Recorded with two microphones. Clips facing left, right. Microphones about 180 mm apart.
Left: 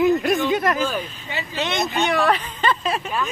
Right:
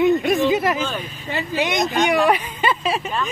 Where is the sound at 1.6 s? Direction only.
15° right (ahead or behind).